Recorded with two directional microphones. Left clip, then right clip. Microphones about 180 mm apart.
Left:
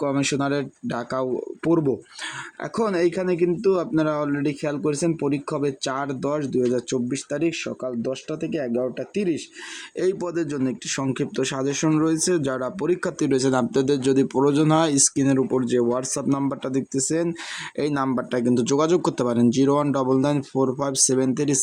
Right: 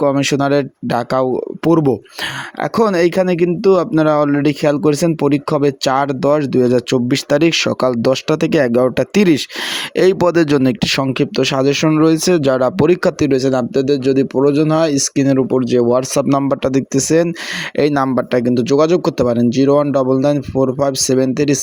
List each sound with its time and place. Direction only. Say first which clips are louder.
0.0 s speech: right 9 dB; 40° right (ahead or behind); by 9.4 s 60° right (ahead or behind)
10.0 s speech: right 12 dB; 45° right (ahead or behind); by 21.6 s 30° right (ahead or behind)